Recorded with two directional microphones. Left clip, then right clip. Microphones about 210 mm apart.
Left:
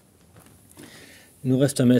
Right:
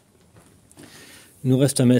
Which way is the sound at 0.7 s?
5° right (ahead or behind).